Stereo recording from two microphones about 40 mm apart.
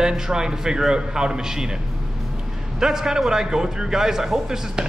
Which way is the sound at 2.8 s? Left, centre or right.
Centre.